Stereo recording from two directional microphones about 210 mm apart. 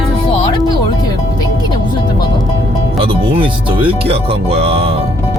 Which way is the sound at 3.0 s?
25° right (ahead or behind).